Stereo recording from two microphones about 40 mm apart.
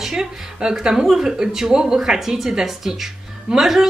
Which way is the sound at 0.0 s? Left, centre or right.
Centre.